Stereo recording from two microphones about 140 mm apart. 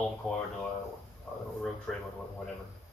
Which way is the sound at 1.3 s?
5° left (ahead or behind).